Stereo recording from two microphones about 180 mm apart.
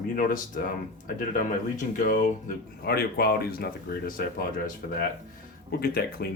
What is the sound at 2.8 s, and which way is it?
Speech, 60° left (ahead or behind).